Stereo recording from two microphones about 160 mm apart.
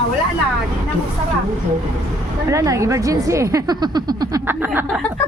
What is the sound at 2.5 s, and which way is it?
Speech, 20° right (ahead or behind).